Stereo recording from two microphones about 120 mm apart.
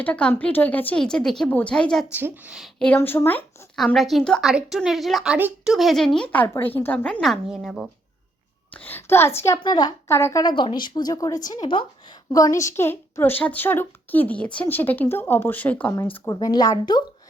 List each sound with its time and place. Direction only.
0.0 s a child's voice: 10° left (ahead or behind)
2.1 s speech: 15° right (ahead or behind)
2.6 s a child's voice: 5° left (ahead or behind)
3.9 s a child's voice: centre (ahead or behind)
7.2 s speech: centre (ahead or behind)
8.7 s a woman's voice: 15° left (ahead or behind)
9.6 s a woman's voice: 35° left (ahead or behind)
10.1 s a woman's voice: 20° left (ahead or behind)
10.4 s a woman's voice: 40° left (ahead or behind)
12.3 s a child's voice: 25° left (ahead or behind)
16.3 s a woman's voice: 35° left (ahead or behind)